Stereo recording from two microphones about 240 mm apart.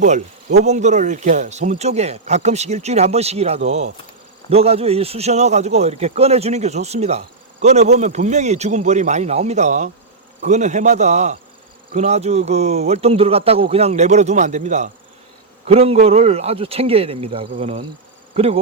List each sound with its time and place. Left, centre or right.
0.6 s a man's voice: right